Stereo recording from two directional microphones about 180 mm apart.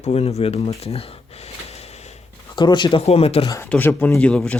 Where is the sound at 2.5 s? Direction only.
25° left (ahead or behind).